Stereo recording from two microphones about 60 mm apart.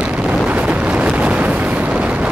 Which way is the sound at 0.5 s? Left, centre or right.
Right.